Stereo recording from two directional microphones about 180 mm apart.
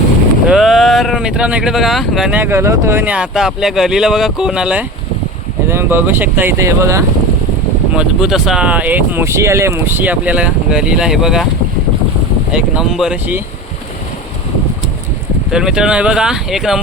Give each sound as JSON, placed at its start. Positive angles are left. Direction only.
{"t": 0.4, "sound": "speech", "side_deg": 0}
{"t": 7.9, "sound": "speech", "side_deg": 0}
{"t": 12.5, "sound": "speech", "side_deg": -5}
{"t": 15.4, "sound": "speech", "side_deg": -5}